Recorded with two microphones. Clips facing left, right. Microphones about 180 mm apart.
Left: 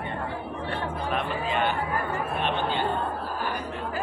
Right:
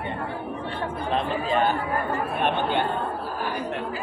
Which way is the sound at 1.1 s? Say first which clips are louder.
Right 5 dB; 35° right (ahead or behind).